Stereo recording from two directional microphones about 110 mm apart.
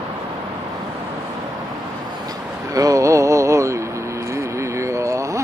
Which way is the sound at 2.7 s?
30° right (ahead or behind).